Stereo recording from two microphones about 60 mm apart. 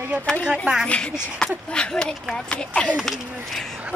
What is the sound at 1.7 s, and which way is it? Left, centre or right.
Child singing, centre.